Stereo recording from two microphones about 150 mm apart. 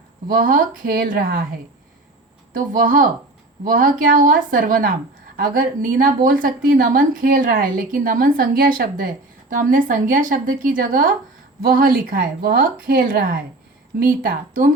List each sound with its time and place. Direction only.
0.3 s a woman's voice: 65° right (ahead or behind)
2.5 s a woman's voice: 65° right (ahead or behind)